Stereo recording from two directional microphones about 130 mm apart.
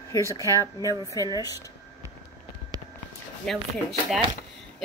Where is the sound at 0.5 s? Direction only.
25° left (ahead or behind).